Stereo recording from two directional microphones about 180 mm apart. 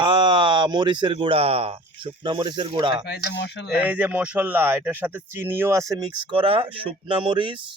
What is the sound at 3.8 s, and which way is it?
Speech, 10° right (ahead or behind).